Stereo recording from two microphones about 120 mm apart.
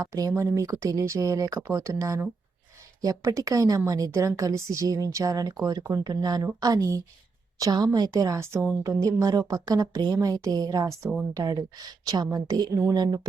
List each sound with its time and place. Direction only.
0.0 s a woman's voice: 30° right (ahead or behind)